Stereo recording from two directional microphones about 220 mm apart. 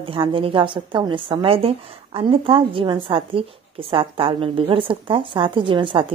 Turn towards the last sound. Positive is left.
turn(degrees=-20)  # may be behind; listen again after turning